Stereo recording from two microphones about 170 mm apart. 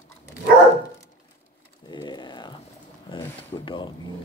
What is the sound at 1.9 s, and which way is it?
Typing, 25° left (ahead or behind).